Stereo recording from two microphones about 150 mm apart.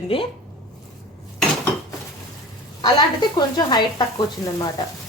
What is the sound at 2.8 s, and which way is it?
Speech, 30° left (ahead or behind).